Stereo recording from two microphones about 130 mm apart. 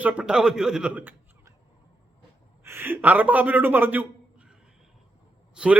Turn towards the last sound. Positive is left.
turn(degrees=-5)  # may be behind; listen again after turning